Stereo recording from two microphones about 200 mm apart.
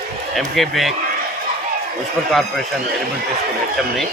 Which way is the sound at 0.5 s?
Centre (ahead or behind).